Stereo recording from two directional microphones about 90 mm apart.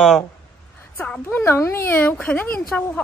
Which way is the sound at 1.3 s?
30° left (ahead or behind).